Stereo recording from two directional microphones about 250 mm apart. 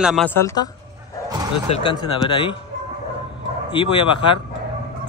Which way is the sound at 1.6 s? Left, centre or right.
Left.